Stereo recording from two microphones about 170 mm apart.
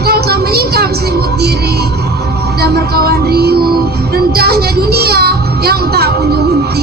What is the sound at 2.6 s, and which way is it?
Music, 70° right (ahead or behind).